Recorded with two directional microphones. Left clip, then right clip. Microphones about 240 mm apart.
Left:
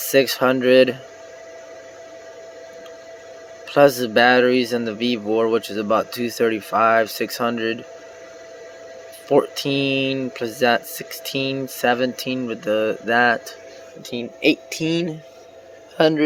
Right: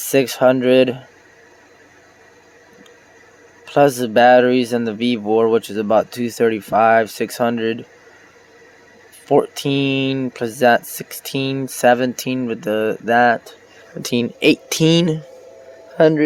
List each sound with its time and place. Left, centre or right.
0.1 s speech: centre
3.8 s speech: centre
9.3 s speech: centre
11.3 s speech: right
11.5 s speech: centre
14.7 s speech: right
16.0 s speech: right